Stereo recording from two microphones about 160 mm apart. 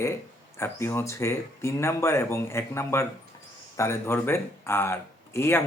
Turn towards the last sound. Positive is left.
turn(degrees=15)  # may be behind; listen again after turning